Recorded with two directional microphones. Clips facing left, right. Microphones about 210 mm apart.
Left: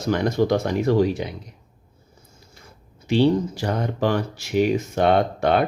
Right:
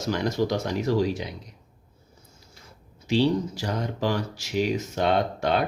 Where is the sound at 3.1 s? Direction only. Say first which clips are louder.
Left 4 dB; 55° left (ahead or behind).